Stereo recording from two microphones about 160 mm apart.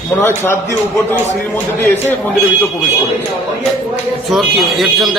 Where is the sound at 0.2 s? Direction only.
15° left (ahead or behind).